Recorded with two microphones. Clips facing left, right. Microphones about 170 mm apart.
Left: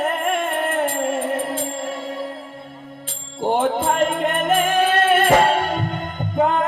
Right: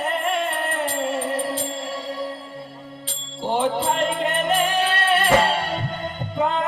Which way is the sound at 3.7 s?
50° left (ahead or behind).